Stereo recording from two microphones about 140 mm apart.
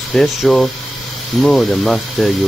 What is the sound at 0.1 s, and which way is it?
Speech, 5° left (ahead or behind).